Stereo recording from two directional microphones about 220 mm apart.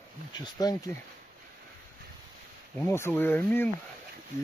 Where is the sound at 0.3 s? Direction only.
20° left (ahead or behind).